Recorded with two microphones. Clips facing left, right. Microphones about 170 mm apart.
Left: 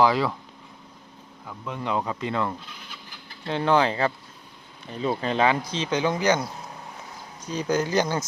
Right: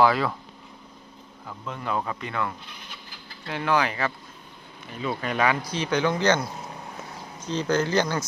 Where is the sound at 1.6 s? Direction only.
15° left (ahead or behind).